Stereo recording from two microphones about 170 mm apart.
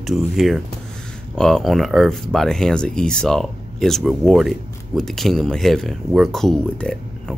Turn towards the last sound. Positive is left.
turn(degrees=5)  # may be behind; listen again after turning